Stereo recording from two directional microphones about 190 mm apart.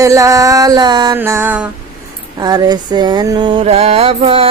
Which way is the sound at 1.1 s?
10° right (ahead or behind).